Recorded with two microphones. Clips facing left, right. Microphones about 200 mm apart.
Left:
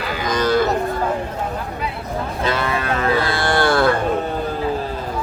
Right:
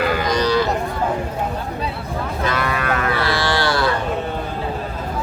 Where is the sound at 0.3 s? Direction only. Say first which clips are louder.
Left 4 dB; 50° left (ahead or behind).